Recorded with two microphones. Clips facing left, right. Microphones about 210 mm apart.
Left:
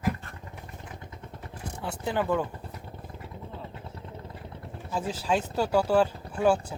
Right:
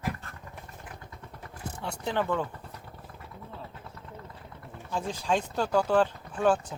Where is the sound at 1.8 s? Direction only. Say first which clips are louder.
Left 1 dB; 5° left (ahead or behind).